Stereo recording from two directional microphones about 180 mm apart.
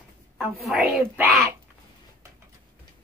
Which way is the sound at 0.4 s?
5° right (ahead or behind).